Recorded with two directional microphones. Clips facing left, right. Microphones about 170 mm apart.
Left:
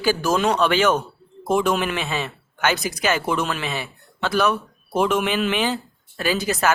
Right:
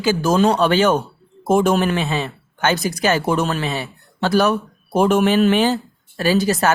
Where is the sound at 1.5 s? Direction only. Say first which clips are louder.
Right 5 dB; 45° right (ahead or behind).